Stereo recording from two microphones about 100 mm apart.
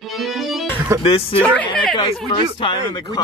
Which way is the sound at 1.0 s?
75° left (ahead or behind).